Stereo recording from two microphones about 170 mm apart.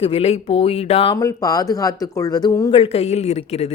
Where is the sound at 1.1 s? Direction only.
20° left (ahead or behind).